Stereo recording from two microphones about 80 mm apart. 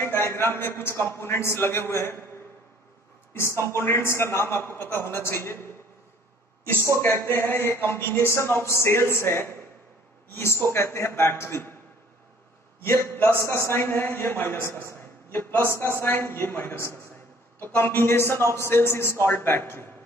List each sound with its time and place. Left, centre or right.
0.1 s a man's voice: left
3.6 s a man's voice: left
7.0 s a man's voice: left
12.8 s a man's voice: left